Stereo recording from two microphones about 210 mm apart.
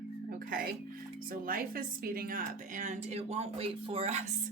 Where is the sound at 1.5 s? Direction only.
45° right (ahead or behind).